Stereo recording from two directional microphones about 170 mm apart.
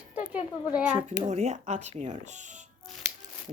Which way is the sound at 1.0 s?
40° right (ahead or behind).